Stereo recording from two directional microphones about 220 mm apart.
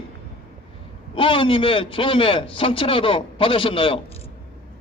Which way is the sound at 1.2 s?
25° left (ahead or behind).